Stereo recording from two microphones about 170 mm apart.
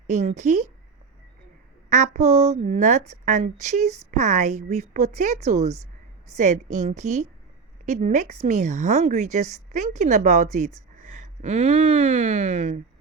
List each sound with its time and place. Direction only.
0.1 s speech: 45° right (ahead or behind)
1.9 s speech: 45° right (ahead or behind)